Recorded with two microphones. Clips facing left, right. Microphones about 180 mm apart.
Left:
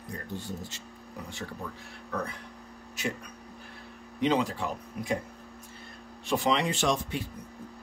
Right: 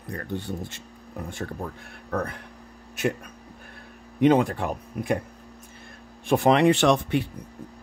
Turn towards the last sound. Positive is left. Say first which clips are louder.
# right 8 dB
turn(degrees=-65)  # may be behind; listen again after turning